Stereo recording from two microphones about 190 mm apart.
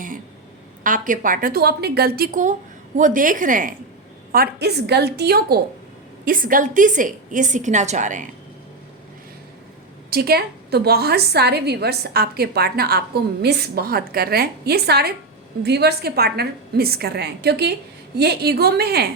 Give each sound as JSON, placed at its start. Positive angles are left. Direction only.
{"t": 0.9, "sound": "a woman's voice", "side_deg": -45}
{"t": 4.3, "sound": "a woman's voice", "side_deg": -55}
{"t": 6.2, "sound": "a woman's voice", "side_deg": -45}
{"t": 10.1, "sound": "a woman's voice", "side_deg": -55}